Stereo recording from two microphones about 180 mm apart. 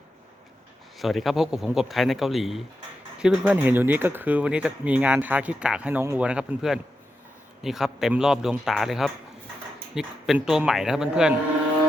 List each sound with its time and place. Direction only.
0.9 s speech: centre (ahead or behind)